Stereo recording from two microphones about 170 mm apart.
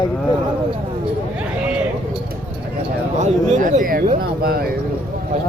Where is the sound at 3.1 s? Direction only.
45° right (ahead or behind); by 4.7 s 65° right (ahead or behind).